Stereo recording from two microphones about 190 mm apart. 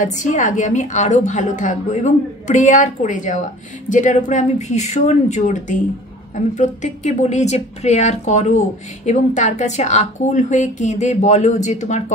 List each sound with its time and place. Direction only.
0.0 s a woman's voice: 40° left (ahead or behind)